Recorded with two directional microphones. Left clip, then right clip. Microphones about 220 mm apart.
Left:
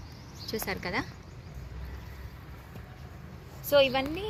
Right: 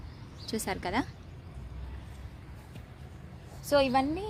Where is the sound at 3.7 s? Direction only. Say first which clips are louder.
Left 2 dB; 50° right (ahead or behind).